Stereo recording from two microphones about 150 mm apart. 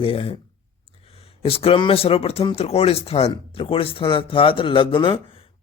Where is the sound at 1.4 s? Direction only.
40° left (ahead or behind).